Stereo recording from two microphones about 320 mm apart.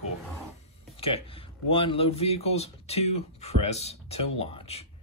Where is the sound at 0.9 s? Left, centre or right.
Centre.